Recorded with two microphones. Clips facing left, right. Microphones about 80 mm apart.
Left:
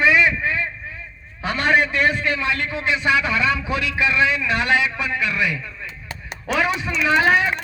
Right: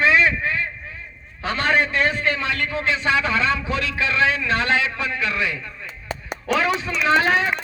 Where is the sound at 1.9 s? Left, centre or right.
Right.